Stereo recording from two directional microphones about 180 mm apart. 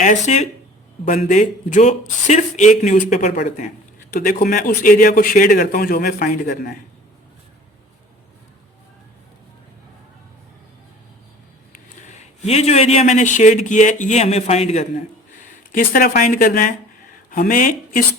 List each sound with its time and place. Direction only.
0.0 s speech: 40° left (ahead or behind)
12.0 s speech: 40° left (ahead or behind)